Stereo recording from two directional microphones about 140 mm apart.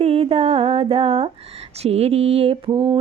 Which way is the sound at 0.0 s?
45° right (ahead or behind).